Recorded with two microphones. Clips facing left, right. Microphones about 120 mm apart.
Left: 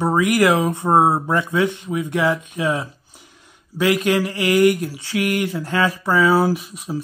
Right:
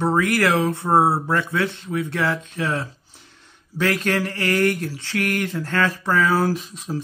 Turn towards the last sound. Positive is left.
turn(degrees=10)  # may be behind; listen again after turning